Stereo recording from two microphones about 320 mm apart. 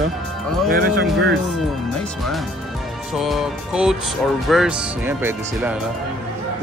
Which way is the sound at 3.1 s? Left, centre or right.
Centre.